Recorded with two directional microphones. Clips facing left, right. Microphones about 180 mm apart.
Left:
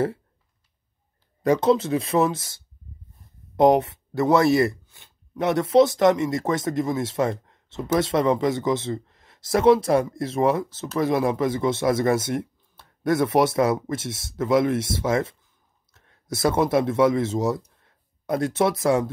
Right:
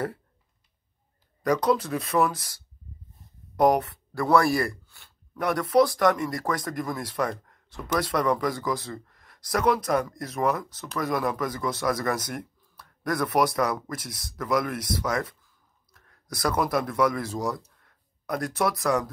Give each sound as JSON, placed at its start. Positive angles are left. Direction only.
{"t": 1.4, "sound": "speech", "side_deg": 25}